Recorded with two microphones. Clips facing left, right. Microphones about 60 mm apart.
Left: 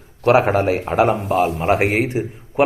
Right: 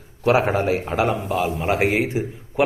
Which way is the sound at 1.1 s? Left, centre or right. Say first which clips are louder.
Left 5 dB; left.